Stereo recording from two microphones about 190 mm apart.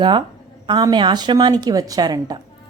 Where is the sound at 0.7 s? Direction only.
20° right (ahead or behind).